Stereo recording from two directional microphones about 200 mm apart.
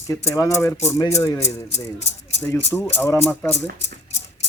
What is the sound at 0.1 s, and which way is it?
Speech, 15° left (ahead or behind).